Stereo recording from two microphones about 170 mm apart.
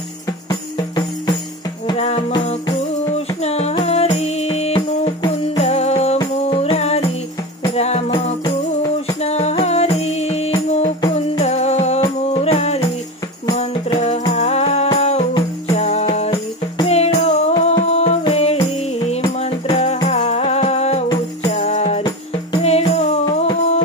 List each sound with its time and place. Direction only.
0.5 s music: 25° left (ahead or behind)
2.0 s music: 40° left (ahead or behind)
13.9 s music: 40° left (ahead or behind)
15.7 s jingle bell: 40° left (ahead or behind)
16.8 s music: 40° left (ahead or behind)
23.2 s music: 25° left (ahead or behind)